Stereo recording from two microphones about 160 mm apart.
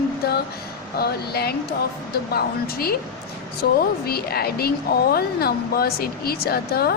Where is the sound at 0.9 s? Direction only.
80° left.